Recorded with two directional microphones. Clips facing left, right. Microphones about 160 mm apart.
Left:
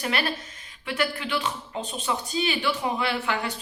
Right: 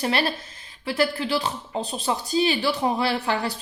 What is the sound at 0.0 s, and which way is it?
A woman's voice, 30° right (ahead or behind).